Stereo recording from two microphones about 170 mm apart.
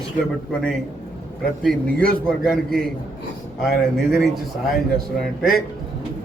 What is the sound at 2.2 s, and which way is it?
A man's voice, centre (ahead or behind).